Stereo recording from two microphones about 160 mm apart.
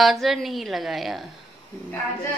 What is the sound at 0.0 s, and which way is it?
Speech, centre (ahead or behind).